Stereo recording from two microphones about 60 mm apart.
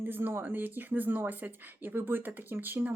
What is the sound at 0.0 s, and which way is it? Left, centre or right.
Speech, right.